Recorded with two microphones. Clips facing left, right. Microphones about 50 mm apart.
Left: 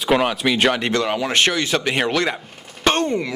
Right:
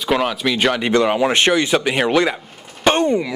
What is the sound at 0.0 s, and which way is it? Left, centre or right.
Speech, centre.